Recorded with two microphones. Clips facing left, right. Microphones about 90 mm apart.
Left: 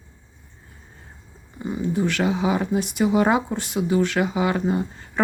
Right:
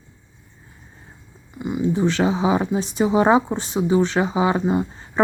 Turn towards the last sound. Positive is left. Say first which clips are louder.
# right 3 dB
turn(degrees=-20)  # may be behind; listen again after turning